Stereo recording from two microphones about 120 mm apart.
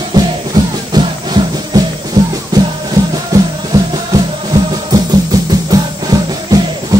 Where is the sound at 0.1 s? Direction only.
35° right (ahead or behind).